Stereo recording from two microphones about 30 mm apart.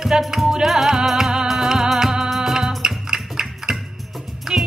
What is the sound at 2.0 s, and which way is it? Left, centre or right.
Music, right.